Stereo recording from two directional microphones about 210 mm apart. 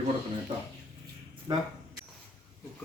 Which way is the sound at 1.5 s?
20° right (ahead or behind).